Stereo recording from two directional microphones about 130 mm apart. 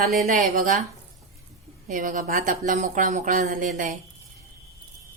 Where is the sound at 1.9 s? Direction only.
90° right.